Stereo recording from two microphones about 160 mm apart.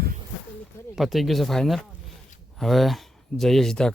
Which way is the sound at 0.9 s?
Centre (ahead or behind).